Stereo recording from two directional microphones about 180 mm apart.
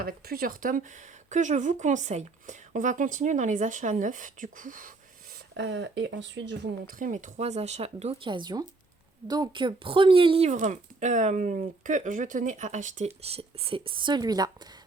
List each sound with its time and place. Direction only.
0.0 s speech: 55° right (ahead or behind)
5.5 s speech: 90° right
6.8 s speech: 45° right (ahead or behind); by 14.7 s 20° right (ahead or behind)